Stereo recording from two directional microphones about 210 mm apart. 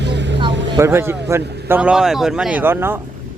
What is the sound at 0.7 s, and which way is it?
Speech, 10° right (ahead or behind).